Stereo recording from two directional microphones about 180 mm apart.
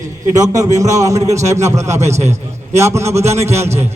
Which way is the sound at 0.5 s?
20° right (ahead or behind).